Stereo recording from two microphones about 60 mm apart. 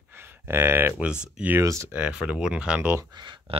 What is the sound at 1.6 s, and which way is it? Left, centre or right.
Speech, right.